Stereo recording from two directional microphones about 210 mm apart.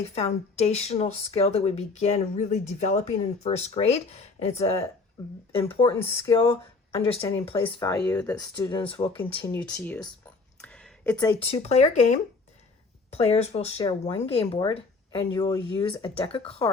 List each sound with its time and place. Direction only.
0.1 s speech: 30° left (ahead or behind)
5.9 s speech: 10° left (ahead or behind)
6.9 s speech: 25° left (ahead or behind)
7.6 s speech: 15° left (ahead or behind)
8.5 s speech: 20° left (ahead or behind)
9.1 s speech: 10° left (ahead or behind)
10.6 s a sound: 5° left (ahead or behind)
11.5 s speech: 30° left (ahead or behind)